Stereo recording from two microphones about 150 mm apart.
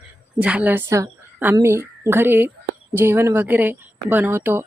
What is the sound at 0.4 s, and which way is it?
A woman's voice, 10° right (ahead or behind).